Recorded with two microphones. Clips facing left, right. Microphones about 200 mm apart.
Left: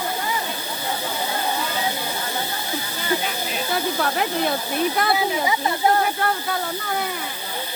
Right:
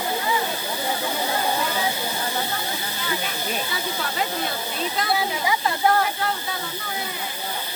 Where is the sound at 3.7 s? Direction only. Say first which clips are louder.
Left 5 dB; 55° left (ahead or behind).